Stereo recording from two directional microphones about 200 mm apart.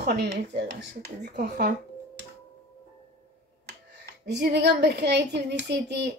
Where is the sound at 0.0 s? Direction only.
55° right (ahead or behind).